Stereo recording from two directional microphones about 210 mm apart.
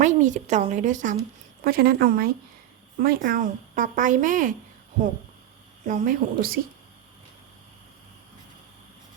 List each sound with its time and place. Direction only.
0.0 s a woman's voice: 35° right (ahead or behind)
5.8 s speech: 40° right (ahead or behind)